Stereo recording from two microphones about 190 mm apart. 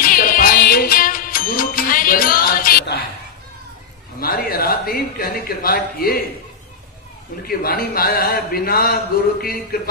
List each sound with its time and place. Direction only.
0.0 s music: 50° left (ahead or behind)
4.2 s a man's voice: 50° left (ahead or behind)
7.4 s a man's voice: 50° left (ahead or behind)